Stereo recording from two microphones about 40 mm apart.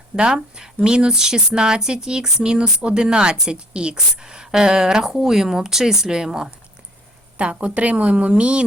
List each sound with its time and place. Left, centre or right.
0.2 s speech: centre
7.3 s a woman's voice: right